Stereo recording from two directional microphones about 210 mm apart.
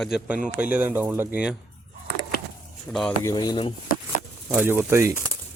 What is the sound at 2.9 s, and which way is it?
Speech, 5° left (ahead or behind).